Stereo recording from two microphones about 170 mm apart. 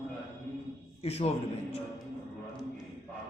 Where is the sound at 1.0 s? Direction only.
35° left (ahead or behind).